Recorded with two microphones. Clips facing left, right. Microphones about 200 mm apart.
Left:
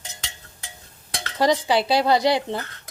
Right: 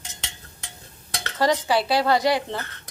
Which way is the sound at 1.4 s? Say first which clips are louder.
Left 2 dB; 15° left (ahead or behind).